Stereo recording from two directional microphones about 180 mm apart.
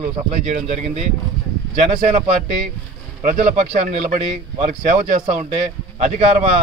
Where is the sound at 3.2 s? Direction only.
40° right (ahead or behind).